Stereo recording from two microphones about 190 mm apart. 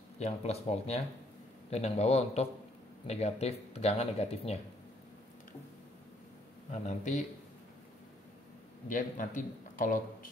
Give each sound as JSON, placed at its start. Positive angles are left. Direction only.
{"t": 0.2, "sound": "speech", "side_deg": 35}
{"t": 6.7, "sound": "speech", "side_deg": 40}
{"t": 8.8, "sound": "a man's voice", "side_deg": 45}